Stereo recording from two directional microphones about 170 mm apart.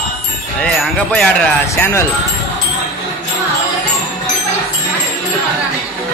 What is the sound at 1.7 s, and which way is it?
Speech, 15° left (ahead or behind).